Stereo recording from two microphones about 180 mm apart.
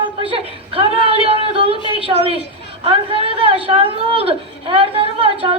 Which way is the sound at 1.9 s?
30° right (ahead or behind).